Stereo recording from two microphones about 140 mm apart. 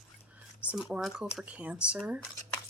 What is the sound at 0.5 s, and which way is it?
Speech, 5° right (ahead or behind).